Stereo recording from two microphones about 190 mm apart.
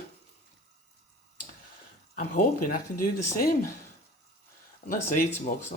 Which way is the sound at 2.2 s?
45° left (ahead or behind).